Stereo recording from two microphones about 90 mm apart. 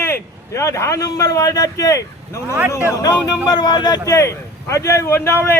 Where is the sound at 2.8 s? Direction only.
45° left (ahead or behind).